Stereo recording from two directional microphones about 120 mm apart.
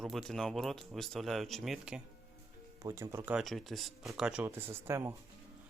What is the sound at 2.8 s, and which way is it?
Speech, 25° right (ahead or behind).